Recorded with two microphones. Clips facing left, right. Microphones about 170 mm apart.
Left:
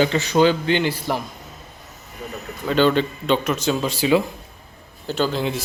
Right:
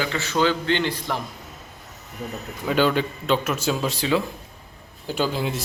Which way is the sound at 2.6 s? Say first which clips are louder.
Left 3 dB; 10° right (ahead or behind).